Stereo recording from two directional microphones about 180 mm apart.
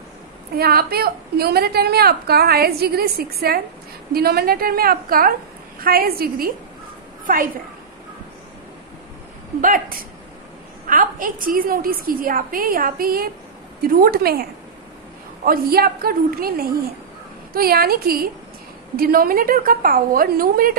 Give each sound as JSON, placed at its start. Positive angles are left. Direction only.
{"t": 0.6, "sound": "a woman's voice", "side_deg": -60}
{"t": 9.6, "sound": "a woman's voice", "side_deg": -50}
{"t": 15.4, "sound": "a woman's voice", "side_deg": -55}